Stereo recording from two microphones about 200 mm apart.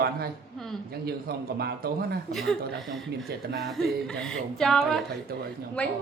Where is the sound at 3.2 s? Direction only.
50° right (ahead or behind).